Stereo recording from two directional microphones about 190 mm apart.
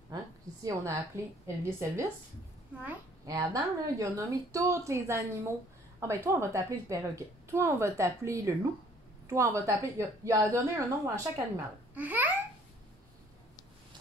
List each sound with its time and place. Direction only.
0.7 s a child's voice: 15° right (ahead or behind)